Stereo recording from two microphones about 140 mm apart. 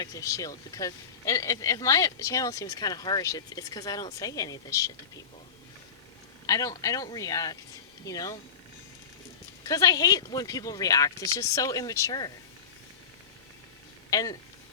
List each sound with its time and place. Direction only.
0.0 s speech: 25° left (ahead or behind)
6.4 s speech: 25° left (ahead or behind)
9.6 s speech: 25° left (ahead or behind)
14.1 s speech: 25° left (ahead or behind)